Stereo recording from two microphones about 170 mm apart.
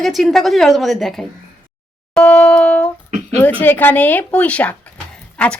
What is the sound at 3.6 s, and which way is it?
A woman's voice, 10° left (ahead or behind).